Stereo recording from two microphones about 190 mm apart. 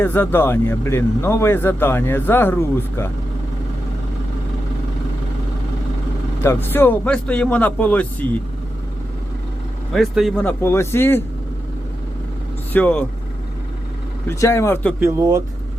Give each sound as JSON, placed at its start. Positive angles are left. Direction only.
{"t": 0.0, "sound": "speech", "side_deg": 10}
{"t": 6.4, "sound": "speech", "side_deg": 10}
{"t": 9.9, "sound": "speech", "side_deg": 0}
{"t": 12.7, "sound": "speech", "side_deg": 10}
{"t": 14.3, "sound": "speech", "side_deg": 15}
{"t": 15.0, "sound": "speech", "side_deg": -15}